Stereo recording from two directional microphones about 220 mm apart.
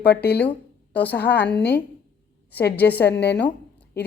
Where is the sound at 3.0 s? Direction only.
50° left (ahead or behind).